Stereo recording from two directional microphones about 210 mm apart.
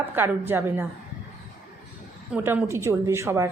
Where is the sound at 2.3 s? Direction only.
10° right (ahead or behind).